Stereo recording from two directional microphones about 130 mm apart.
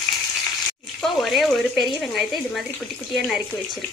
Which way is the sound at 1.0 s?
Centre (ahead or behind).